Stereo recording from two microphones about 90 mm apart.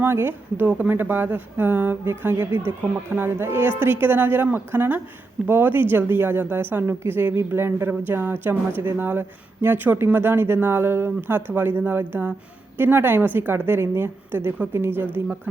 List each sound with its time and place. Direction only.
0.0 s a woman's voice: 25° right (ahead or behind)